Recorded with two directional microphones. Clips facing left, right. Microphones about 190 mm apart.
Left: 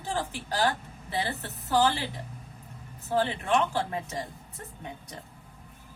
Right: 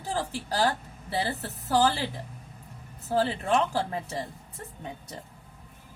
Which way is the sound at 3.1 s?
35° right (ahead or behind).